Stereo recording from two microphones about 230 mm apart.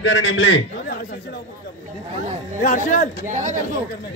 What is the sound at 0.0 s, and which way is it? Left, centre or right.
Speech, left.